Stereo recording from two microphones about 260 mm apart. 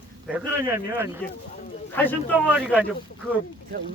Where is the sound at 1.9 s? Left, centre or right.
Centre.